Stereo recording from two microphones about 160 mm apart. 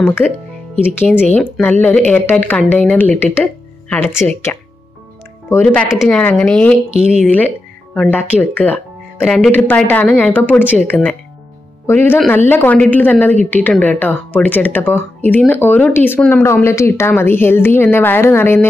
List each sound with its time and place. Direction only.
0.8 s speech: 15° left (ahead or behind)
5.9 s speech: centre (ahead or behind)
6.9 s speech: 45° left (ahead or behind)
7.2 s speech: 10° left (ahead or behind)